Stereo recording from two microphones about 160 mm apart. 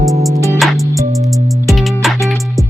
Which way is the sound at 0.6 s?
Centre (ahead or behind).